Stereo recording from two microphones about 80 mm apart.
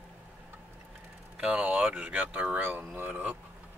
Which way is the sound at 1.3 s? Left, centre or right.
Centre.